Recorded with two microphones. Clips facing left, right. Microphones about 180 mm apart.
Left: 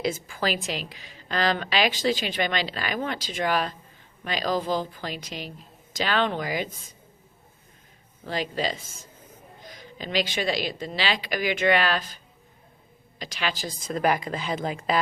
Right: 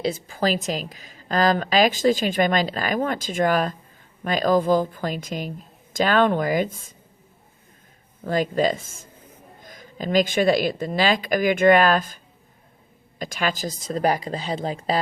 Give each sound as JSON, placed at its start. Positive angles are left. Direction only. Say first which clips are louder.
{"t": 0.0, "sound": "a woman's voice", "louder": "right 4 dB", "side_deg": -35}
{"t": 8.2, "sound": "a woman's voice", "louder": "right 7 dB", "side_deg": -45}